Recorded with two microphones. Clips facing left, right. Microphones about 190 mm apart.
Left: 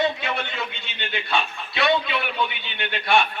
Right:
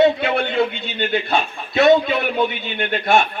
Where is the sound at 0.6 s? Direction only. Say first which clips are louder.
Right 13 dB; 40° right (ahead or behind).